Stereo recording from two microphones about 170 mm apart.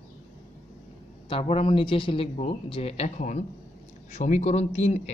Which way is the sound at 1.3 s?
30° left (ahead or behind).